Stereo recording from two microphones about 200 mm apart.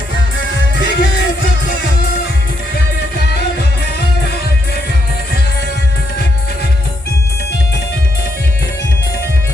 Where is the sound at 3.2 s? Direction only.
55° left (ahead or behind).